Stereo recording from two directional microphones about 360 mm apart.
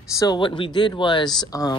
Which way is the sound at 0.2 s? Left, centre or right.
Centre.